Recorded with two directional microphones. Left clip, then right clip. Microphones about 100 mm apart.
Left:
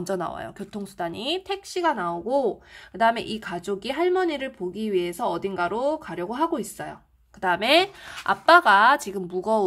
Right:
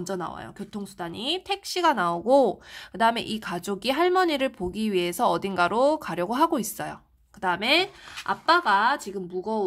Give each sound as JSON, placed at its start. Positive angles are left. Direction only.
{"t": 0.0, "sound": "speech", "side_deg": 10}
{"t": 1.7, "sound": "speech", "side_deg": -20}
{"t": 2.1, "sound": "speech", "side_deg": -40}
{"t": 2.9, "sound": "speech", "side_deg": -15}
{"t": 3.6, "sound": "speech", "side_deg": -25}
{"t": 7.6, "sound": "speech", "side_deg": 15}
{"t": 8.3, "sound": "a woman's voice", "side_deg": 30}